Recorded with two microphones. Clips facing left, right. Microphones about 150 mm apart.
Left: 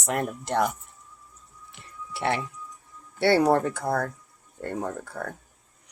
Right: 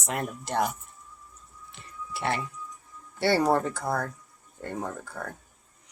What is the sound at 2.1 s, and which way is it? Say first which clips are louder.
Music: left 3 dB; 65° left (ahead or behind).